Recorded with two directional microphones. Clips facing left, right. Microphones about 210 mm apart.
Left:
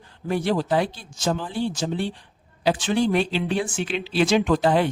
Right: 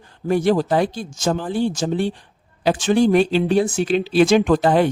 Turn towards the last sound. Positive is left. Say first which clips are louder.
# right 4 dB
turn(degrees=-50)  # may be behind; listen again after turning